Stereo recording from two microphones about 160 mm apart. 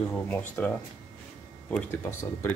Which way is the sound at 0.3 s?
10° left (ahead or behind).